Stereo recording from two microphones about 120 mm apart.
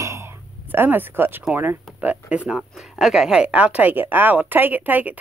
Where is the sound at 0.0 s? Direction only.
25° right (ahead or behind).